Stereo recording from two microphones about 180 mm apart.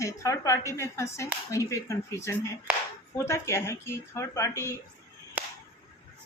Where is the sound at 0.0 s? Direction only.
15° left (ahead or behind).